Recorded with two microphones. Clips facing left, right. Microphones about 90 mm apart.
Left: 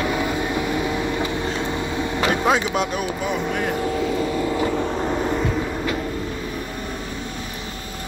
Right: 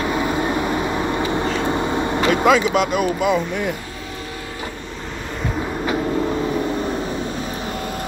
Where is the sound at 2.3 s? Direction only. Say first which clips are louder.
Right 6 dB; 85° right.